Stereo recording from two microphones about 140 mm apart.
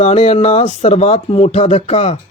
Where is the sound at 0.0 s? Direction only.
50° left (ahead or behind).